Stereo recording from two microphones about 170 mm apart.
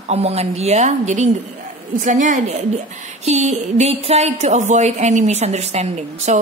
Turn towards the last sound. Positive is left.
turn(degrees=-40)  # may be behind; listen again after turning